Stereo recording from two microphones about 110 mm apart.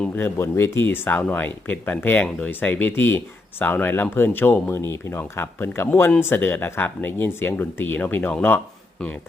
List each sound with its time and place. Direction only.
0.0 s speech: 20° left (ahead or behind)